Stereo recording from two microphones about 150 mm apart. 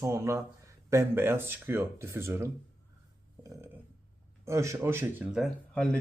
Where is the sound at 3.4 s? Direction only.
20° right (ahead or behind).